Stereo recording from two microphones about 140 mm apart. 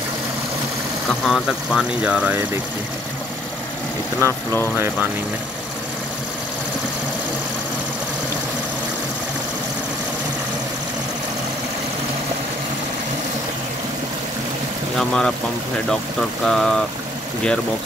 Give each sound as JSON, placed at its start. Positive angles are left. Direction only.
{"t": 1.2, "sound": "speech", "side_deg": 0}
{"t": 4.2, "sound": "speech", "side_deg": -20}
{"t": 15.0, "sound": "speech", "side_deg": 5}